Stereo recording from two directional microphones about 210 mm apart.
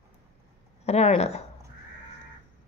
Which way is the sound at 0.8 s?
30° left (ahead or behind).